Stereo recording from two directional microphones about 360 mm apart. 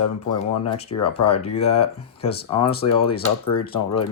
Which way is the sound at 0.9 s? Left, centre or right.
Left.